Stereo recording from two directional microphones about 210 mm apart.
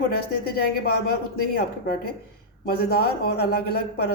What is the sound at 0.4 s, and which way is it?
A man's voice, 45° left (ahead or behind).